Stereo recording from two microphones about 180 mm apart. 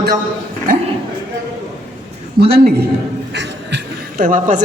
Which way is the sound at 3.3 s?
70° right (ahead or behind).